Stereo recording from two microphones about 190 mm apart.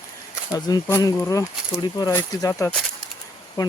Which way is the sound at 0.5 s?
20° left (ahead or behind).